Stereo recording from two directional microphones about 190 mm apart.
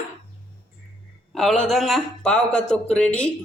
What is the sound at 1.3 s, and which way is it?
A man's voice, centre (ahead or behind).